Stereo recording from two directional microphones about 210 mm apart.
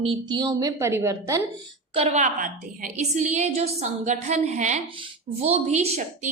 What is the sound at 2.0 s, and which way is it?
A woman's voice, 30° right (ahead or behind).